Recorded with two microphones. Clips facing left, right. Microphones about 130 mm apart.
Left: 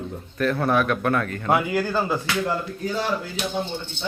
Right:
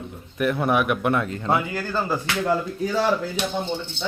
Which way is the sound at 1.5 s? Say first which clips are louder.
Left 3 dB; 10° left (ahead or behind).